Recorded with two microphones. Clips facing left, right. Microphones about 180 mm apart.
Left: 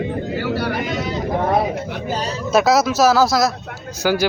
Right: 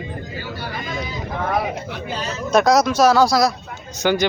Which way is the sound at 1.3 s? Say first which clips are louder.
Left 4 dB; 30° left (ahead or behind).